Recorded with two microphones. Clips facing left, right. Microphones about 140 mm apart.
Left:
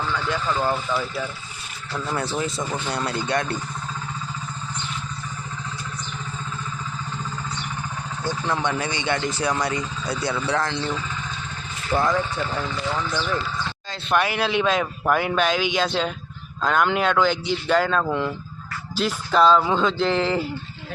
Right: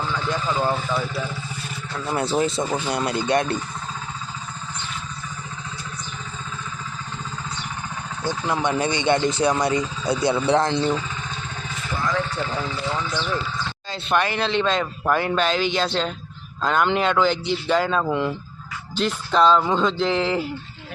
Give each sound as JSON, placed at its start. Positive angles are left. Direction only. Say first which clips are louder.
{"t": 0.4, "sound": "speech", "louder": "right 1 dB", "side_deg": -10}
{"t": 2.0, "sound": "speech", "louder": "right 5 dB", "side_deg": -20}
{"t": 2.6, "sound": "speech", "louder": "right 3 dB", "side_deg": -15}
{"t": 8.3, "sound": "speech", "louder": "right 1 dB", "side_deg": -10}
{"t": 8.8, "sound": "speech", "louder": "right 5 dB", "side_deg": -20}
{"t": 12.1, "sound": "speech", "louder": "even", "side_deg": 0}